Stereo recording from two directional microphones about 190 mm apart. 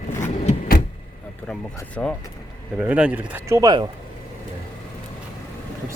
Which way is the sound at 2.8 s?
5° right (ahead or behind).